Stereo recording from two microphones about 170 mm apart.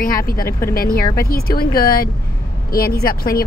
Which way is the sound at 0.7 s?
60° left (ahead or behind).